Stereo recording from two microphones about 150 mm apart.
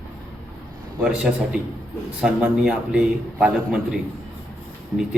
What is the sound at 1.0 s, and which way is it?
Speech, 5° right (ahead or behind).